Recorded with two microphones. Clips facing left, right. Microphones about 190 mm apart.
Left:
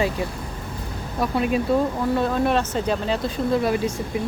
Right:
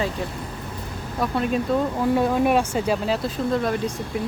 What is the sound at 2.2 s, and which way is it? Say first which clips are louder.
Speech: right 2 dB; 10° right (ahead or behind).